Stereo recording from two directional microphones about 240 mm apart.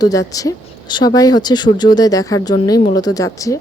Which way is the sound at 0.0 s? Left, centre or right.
Centre.